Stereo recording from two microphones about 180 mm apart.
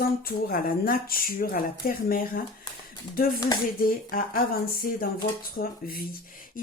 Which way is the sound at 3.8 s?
55° left (ahead or behind).